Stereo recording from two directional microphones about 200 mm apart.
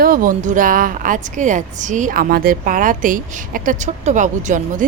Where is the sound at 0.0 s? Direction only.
45° right (ahead or behind).